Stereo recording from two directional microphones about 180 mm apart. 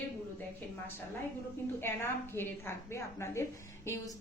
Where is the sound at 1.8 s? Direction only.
15° left (ahead or behind).